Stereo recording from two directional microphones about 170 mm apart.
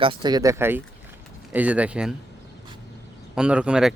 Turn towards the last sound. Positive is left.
turn(degrees=-5)  # may be behind; listen again after turning